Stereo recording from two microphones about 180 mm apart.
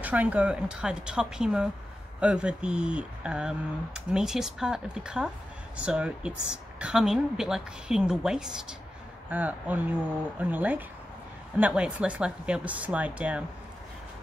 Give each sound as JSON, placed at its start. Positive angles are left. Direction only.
{"t": 0.0, "sound": "speech", "side_deg": -10}